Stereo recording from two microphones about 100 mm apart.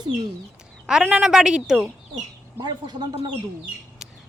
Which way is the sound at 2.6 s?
50° right (ahead or behind).